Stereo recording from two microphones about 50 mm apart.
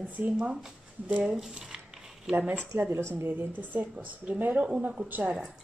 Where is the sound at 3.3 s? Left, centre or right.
Right.